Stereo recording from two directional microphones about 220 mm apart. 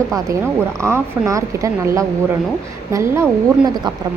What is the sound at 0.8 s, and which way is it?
Speech, 10° right (ahead or behind).